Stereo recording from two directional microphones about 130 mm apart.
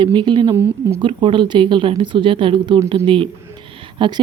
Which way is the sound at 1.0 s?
40° right (ahead or behind).